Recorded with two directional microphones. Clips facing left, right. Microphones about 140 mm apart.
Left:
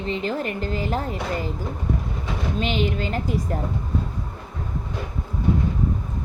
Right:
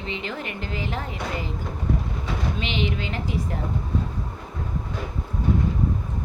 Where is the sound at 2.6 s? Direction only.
45° left (ahead or behind).